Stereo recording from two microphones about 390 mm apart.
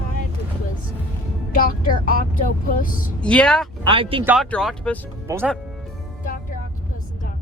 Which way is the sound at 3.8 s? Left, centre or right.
Centre.